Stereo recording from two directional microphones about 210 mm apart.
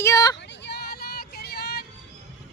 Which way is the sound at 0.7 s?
50° left (ahead or behind).